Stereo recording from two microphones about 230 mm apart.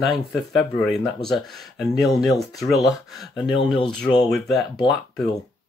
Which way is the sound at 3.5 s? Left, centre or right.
Left.